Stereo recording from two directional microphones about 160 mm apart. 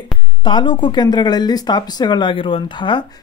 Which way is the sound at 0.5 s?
30° left (ahead or behind).